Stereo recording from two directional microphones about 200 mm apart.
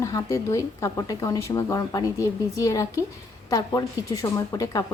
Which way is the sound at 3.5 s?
15° left (ahead or behind).